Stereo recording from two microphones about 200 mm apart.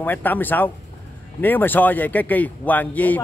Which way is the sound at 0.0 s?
10° left (ahead or behind).